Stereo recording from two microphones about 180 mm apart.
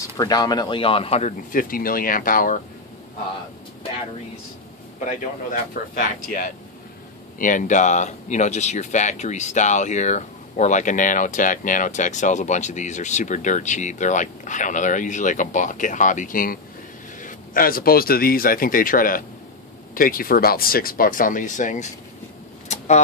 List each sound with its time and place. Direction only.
0.2 s speech: 20° left (ahead or behind)
1.5 s speech: 50° left (ahead or behind)
5.5 s speech: 50° left (ahead or behind)
22.7 s a sound: 40° left (ahead or behind)